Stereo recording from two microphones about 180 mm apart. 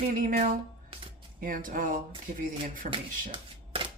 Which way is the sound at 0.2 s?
50° right (ahead or behind).